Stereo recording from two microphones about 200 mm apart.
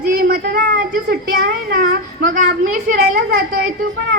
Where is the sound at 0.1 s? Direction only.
45° right (ahead or behind).